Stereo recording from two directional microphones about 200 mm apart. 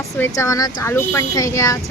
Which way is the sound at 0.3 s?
15° left (ahead or behind).